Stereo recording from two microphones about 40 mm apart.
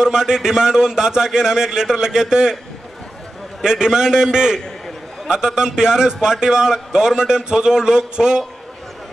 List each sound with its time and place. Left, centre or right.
0.0 s a man's voice: centre
3.6 s a man's voice: centre